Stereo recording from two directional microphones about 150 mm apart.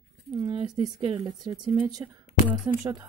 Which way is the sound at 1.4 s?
25° right (ahead or behind).